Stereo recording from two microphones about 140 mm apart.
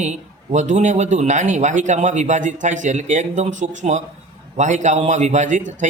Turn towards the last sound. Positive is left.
turn(degrees=-65)  # may be behind; listen again after turning